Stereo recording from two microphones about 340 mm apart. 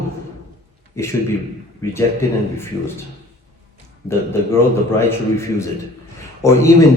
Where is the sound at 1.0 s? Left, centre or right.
Centre.